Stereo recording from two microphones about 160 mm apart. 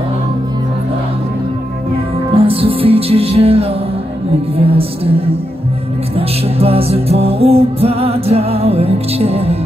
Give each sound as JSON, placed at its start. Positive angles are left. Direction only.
{"t": 2.3, "sound": "music", "side_deg": -35}